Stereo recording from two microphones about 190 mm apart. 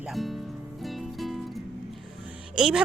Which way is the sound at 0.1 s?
Centre (ahead or behind).